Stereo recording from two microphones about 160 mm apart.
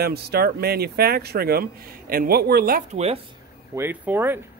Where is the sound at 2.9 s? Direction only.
40° right (ahead or behind).